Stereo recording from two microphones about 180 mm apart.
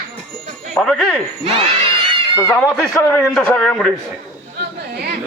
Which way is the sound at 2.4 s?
15° left (ahead or behind).